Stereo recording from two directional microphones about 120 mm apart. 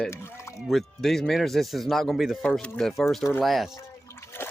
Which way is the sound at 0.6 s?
Centre (ahead or behind).